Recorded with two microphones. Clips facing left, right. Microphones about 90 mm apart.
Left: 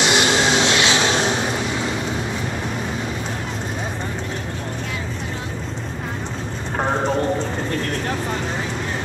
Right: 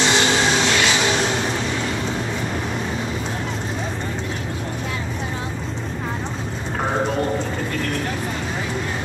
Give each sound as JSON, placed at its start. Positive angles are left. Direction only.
{"t": 0.0, "sound": "vehicle", "side_deg": 15}